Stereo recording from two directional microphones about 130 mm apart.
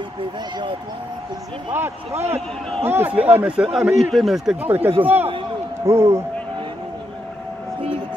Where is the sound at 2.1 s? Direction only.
55° right (ahead or behind).